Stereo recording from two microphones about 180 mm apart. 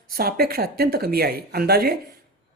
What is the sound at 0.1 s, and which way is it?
A woman's voice, 55° right (ahead or behind).